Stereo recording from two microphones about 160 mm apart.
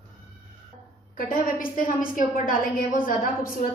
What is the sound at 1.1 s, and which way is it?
A woman's voice, 60° left (ahead or behind).